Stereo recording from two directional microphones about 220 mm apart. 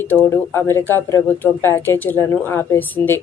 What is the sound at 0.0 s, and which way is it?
Speech, 10° left (ahead or behind).